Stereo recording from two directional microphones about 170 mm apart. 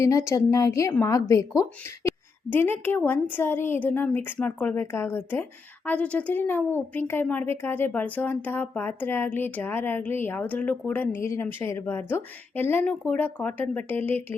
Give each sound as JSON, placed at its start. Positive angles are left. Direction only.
{"t": 0.0, "sound": "a woman's voice", "side_deg": 20}